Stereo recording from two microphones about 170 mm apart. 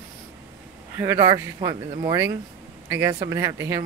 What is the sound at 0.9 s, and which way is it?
Speech, 15° right (ahead or behind).